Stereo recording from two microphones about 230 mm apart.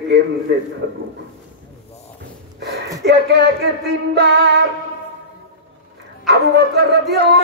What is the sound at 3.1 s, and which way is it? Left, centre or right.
Speech, right.